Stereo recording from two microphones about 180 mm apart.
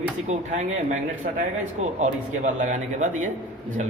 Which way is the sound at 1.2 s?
55° right (ahead or behind).